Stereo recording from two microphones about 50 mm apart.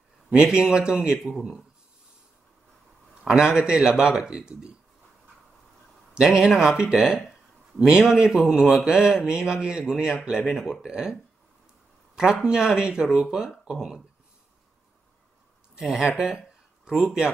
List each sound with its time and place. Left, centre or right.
0.3 s a man's voice: centre
3.3 s a man's voice: centre
6.1 s a man's voice: centre
9.8 s speech: centre
10.1 s a man's voice: centre
12.2 s a man's voice: centre
15.8 s a man's voice: centre